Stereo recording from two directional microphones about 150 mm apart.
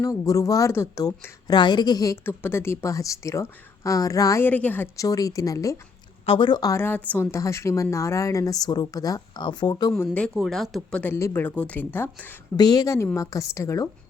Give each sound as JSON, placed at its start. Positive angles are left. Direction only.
{"t": 0.0, "sound": "a woman's voice", "side_deg": 25}
{"t": 5.0, "sound": "a woman's voice", "side_deg": 25}
{"t": 6.2, "sound": "a woman's voice", "side_deg": 35}
{"t": 10.2, "sound": "speech", "side_deg": 5}
{"t": 11.0, "sound": "a woman's voice", "side_deg": 15}
{"t": 12.5, "sound": "a woman's voice", "side_deg": 25}